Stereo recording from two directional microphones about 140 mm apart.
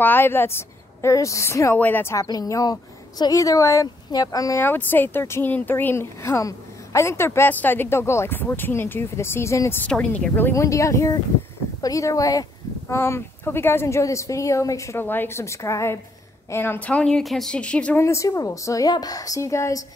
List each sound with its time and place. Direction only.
0.0 s a woman's voice: 15° left (ahead or behind)
18.0 s speech: 20° left (ahead or behind)